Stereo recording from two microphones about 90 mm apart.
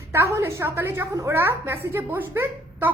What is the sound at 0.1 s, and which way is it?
A woman's voice, 30° right (ahead or behind).